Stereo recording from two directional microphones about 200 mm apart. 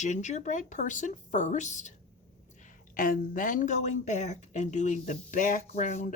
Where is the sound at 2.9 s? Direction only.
45° left (ahead or behind).